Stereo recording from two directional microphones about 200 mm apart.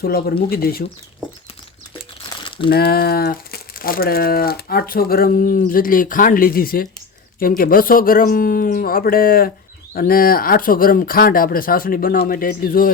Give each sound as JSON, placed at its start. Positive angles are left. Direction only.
{"t": 0.0, "sound": "speech", "side_deg": 50}
{"t": 2.6, "sound": "speech", "side_deg": 50}